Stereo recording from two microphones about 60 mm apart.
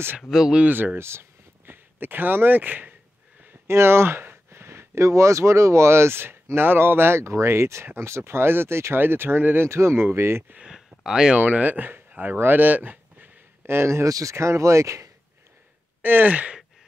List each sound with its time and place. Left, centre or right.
0.3 s speech: centre
0.7 s speech: right
0.9 s speech: right
3.6 s speech: right
9.7 s speech: right
10.5 s a sound: centre
11.3 s speech: right
13.7 s speech: right
14.0 s speech: right
14.3 s speech: right
16.0 s speech: right